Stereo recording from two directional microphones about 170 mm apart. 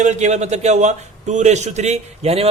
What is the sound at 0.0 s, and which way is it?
A man's voice, 40° right (ahead or behind).